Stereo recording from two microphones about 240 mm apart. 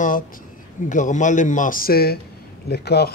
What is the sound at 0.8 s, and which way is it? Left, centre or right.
Speech, left.